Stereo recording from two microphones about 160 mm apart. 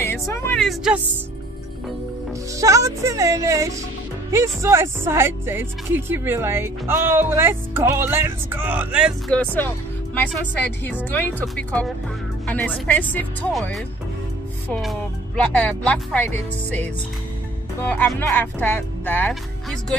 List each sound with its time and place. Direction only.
0.0 s a sound: 15° left (ahead or behind)
0.6 s a woman's voice: centre (ahead or behind)
2.5 s speech: 20° right (ahead or behind)
9.3 s a woman's voice: 10° left (ahead or behind)